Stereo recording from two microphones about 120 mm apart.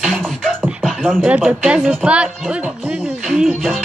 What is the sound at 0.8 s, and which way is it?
Beatboxing, centre (ahead or behind).